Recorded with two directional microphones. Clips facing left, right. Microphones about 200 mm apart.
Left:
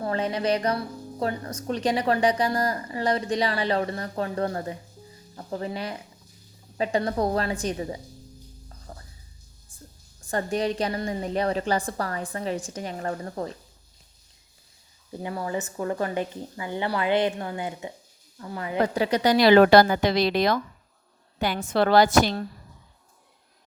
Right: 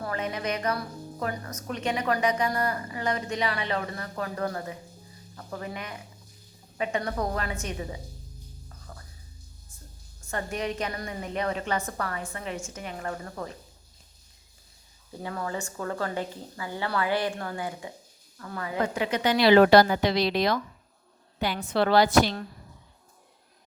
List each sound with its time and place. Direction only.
0.0 s a woman's voice: 30° left (ahead or behind)
8.9 s music: 30° left (ahead or behind)
10.2 s a woman's voice: 35° left (ahead or behind)
15.2 s speech: 15° left (ahead or behind)
18.8 s speech: 35° left (ahead or behind)